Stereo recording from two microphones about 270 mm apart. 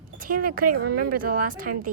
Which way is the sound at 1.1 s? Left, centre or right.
Right.